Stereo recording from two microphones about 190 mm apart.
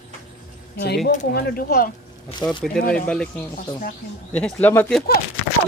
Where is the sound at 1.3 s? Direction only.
55° left (ahead or behind).